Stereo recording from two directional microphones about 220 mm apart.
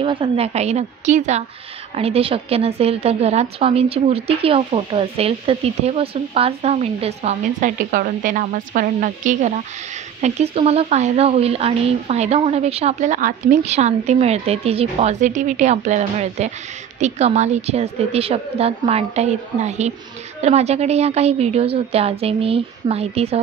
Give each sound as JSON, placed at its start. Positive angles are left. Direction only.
{"t": 0.0, "sound": "a woman's voice", "side_deg": -25}